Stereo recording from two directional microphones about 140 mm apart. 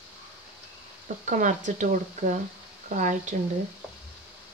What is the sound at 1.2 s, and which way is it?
Speech, 65° right (ahead or behind).